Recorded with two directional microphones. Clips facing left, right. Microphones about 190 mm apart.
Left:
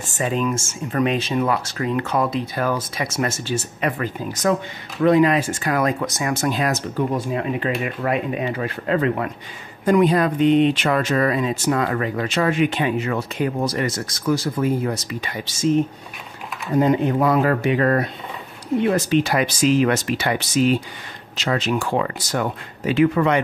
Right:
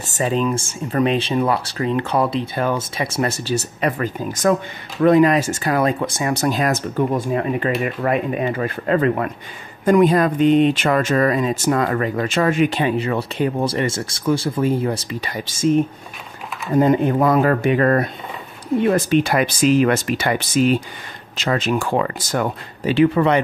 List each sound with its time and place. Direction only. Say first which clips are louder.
0.2 s speech: right 2 dB; 30° right (ahead or behind)
16.7 s speech: right 2 dB; 50° right (ahead or behind)
22.8 s speech: right 2 dB; 30° right (ahead or behind)